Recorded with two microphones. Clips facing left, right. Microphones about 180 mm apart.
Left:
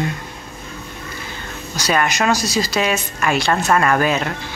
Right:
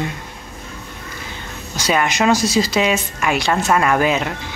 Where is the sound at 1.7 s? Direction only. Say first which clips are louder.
Even; 20° right (ahead or behind).